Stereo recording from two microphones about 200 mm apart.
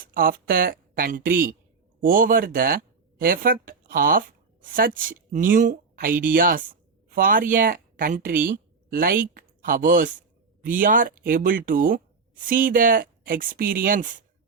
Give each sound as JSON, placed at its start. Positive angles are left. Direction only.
{"t": 0.0, "sound": "speech", "side_deg": -45}